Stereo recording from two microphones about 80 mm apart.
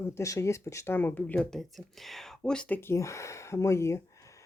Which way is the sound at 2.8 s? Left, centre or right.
Left.